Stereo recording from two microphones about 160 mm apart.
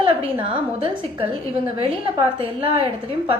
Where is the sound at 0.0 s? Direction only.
35° right (ahead or behind).